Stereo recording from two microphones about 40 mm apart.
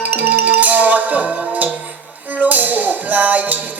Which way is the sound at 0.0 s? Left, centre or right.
Right.